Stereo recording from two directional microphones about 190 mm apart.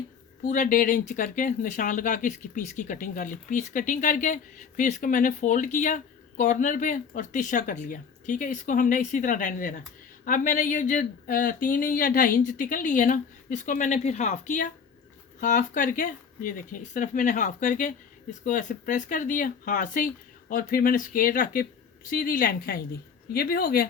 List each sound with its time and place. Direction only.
0.4 s speech: 45° left (ahead or behind)